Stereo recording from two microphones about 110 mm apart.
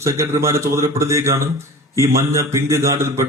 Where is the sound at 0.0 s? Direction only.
25° right (ahead or behind).